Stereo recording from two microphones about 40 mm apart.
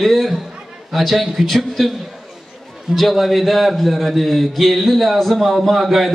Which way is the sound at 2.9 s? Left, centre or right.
Centre.